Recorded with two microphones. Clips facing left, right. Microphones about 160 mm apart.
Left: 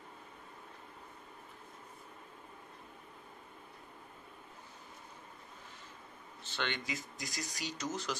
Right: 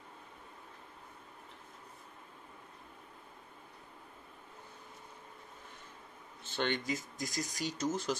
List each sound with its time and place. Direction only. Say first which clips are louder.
6.4 s speech: right 5 dB; 45° right (ahead or behind)